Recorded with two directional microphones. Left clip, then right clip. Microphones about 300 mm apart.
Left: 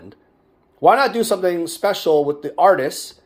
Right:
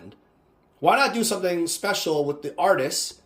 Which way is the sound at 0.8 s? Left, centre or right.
Centre.